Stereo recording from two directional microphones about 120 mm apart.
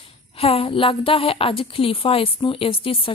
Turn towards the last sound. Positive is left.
turn(degrees=50)  # may be behind; listen again after turning